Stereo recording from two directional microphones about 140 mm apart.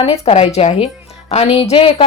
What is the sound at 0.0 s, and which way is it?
A woman's voice, 45° left (ahead or behind).